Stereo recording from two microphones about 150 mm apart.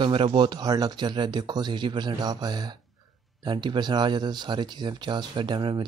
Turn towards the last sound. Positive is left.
turn(degrees=-30)  # may be behind; listen again after turning